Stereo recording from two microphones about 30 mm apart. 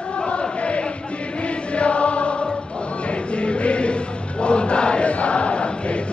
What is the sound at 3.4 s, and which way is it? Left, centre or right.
Choir, left.